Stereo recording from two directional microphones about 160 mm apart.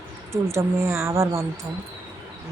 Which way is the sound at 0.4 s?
15° right (ahead or behind).